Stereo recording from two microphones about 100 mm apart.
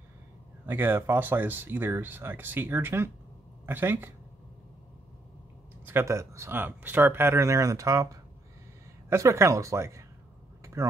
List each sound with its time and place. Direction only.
0.7 s speech: 20° right (ahead or behind)
5.9 s speech: 25° right (ahead or behind)
10.6 s vehicle: 30° right (ahead or behind)